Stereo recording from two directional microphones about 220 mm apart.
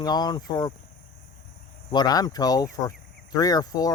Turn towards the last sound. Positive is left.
turn(degrees=15)  # may be behind; listen again after turning